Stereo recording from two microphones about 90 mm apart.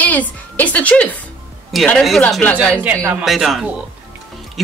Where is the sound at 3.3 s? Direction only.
Centre (ahead or behind).